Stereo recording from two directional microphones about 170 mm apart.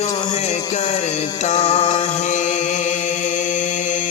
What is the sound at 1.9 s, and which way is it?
Chant, 45° left (ahead or behind).